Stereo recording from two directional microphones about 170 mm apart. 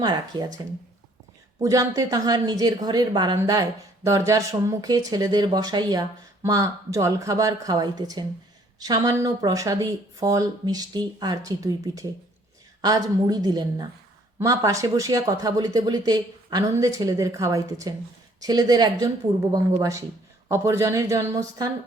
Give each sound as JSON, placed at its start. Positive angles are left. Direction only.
{"t": 0.0, "sound": "a woman's voice", "side_deg": -25}
{"t": 1.6, "sound": "a woman's voice", "side_deg": -20}